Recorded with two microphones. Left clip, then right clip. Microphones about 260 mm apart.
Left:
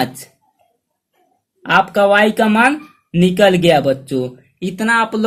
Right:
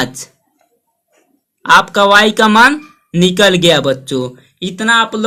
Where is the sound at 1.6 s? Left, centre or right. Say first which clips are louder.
Right 4 dB; right.